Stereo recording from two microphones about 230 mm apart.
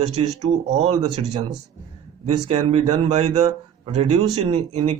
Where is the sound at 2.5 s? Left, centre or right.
Right.